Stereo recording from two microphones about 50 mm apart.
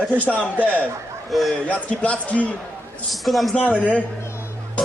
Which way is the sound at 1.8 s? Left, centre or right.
Left.